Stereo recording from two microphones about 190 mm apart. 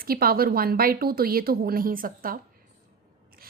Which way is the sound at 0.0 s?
50° right (ahead or behind).